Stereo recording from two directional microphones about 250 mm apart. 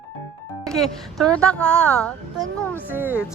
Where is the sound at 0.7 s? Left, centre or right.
Centre.